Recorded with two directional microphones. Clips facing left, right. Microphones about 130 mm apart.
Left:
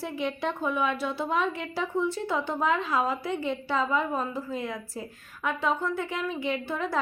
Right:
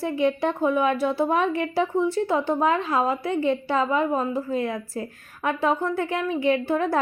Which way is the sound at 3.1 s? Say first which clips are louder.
Right 6 dB; 50° right (ahead or behind).